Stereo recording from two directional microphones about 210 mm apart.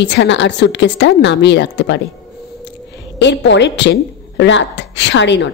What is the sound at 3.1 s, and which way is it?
A woman's voice, 55° left (ahead or behind).